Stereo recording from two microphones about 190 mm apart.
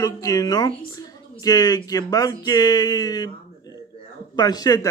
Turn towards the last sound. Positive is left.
turn(degrees=20)  # may be behind; listen again after turning